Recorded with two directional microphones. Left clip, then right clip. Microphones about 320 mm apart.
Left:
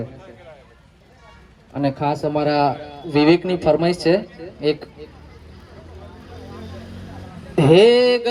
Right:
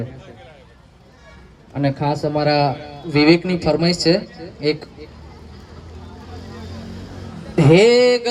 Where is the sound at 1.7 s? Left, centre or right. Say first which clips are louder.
Even; left.